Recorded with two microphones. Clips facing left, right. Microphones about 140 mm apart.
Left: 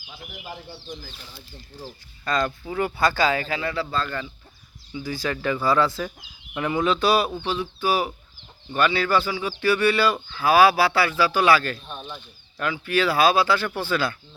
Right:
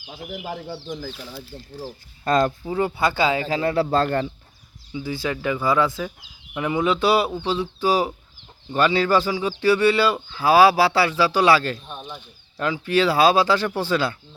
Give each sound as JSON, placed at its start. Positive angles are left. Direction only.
{"t": 0.1, "sound": "speech", "side_deg": -40}
{"t": 0.5, "sound": "speech", "side_deg": -80}
{"t": 1.5, "sound": "speech", "side_deg": -10}
{"t": 2.2, "sound": "speech", "side_deg": -45}
{"t": 2.6, "sound": "speech", "side_deg": -25}
{"t": 3.8, "sound": "a man's voice", "side_deg": -65}
{"t": 4.9, "sound": "speech", "side_deg": -25}
{"t": 11.9, "sound": "speech", "side_deg": -10}
{"t": 12.5, "sound": "speech", "side_deg": -30}